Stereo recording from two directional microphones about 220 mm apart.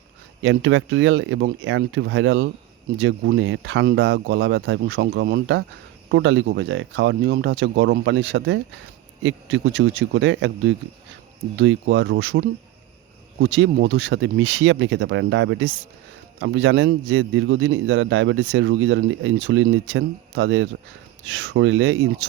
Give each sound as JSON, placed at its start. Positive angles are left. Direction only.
{"t": 0.4, "sound": "a man's voice", "side_deg": -60}